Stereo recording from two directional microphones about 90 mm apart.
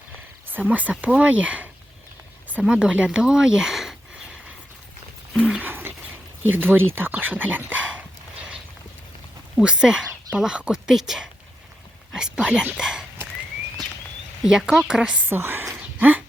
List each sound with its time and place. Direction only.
0.4 s speech: 20° right (ahead or behind); by 4.4 s 5° right (ahead or behind)
5.6 s a sound: 20° right (ahead or behind)
6.4 s speech: 20° right (ahead or behind)
9.6 s speech: 10° right (ahead or behind)
12.7 s dog: 5° right (ahead or behind)
14.4 s speech: 5° right (ahead or behind)
15.3 s a sound: 25° right (ahead or behind)